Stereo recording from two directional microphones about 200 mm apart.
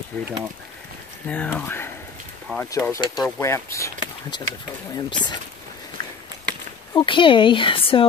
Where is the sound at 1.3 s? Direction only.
5° left (ahead or behind); by 5.4 s 20° left (ahead or behind).